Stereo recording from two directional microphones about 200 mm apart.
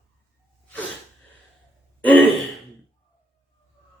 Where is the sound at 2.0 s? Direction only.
5° left (ahead or behind).